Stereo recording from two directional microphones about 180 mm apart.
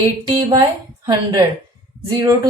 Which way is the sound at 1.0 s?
20° right (ahead or behind).